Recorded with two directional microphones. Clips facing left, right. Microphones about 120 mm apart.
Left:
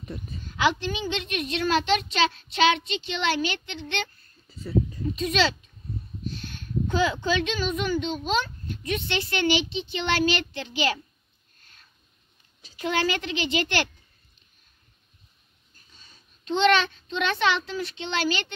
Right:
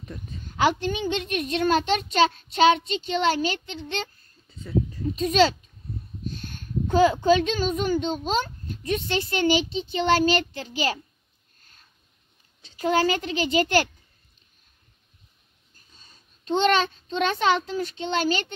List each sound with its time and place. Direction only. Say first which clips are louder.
0.1 s speech: left 3 dB; 10° left (ahead or behind)
0.6 s a child's voice: right 2 dB; 45° right (ahead or behind)
4.5 s a sound: left 3 dB; 5° left (ahead or behind)
5.1 s speech: right 5 dB; 45° right (ahead or behind)
6.9 s a child's voice: right 7 dB; 40° right (ahead or behind)
12.7 s a child's voice: right 4 dB; 40° right (ahead or behind)
16.0 s a child's voice: left 1 dB; 40° right (ahead or behind)